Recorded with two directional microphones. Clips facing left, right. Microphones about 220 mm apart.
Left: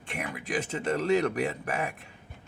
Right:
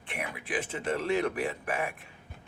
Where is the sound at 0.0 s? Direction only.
45° left (ahead or behind).